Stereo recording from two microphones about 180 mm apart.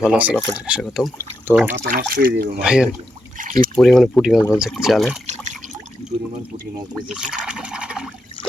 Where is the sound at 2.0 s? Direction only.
65° right (ahead or behind).